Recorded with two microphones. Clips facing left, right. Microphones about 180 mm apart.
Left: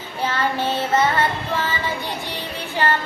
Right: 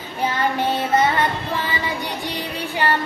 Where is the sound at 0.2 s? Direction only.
15° right (ahead or behind).